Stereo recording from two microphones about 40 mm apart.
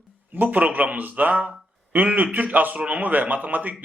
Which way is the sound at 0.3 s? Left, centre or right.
Right.